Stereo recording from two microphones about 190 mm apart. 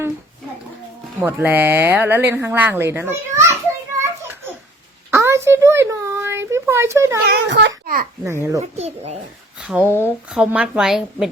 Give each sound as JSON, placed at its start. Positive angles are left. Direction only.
{"t": 1.2, "sound": "speech", "side_deg": -10}
{"t": 5.1, "sound": "a sound", "side_deg": -15}
{"t": 6.5, "sound": "speech", "side_deg": -15}
{"t": 7.3, "sound": "a child's voice", "side_deg": -65}
{"t": 8.2, "sound": "speech", "side_deg": -15}
{"t": 8.7, "sound": "a child's voice", "side_deg": -35}
{"t": 9.6, "sound": "a woman's voice", "side_deg": -10}